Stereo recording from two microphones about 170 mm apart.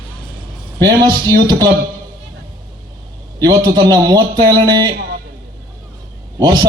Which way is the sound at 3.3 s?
25° right (ahead or behind).